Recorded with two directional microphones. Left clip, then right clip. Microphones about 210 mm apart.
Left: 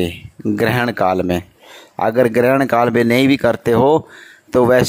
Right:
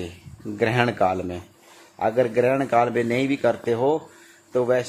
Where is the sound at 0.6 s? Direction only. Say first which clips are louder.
Left 4 dB; 50° left (ahead or behind).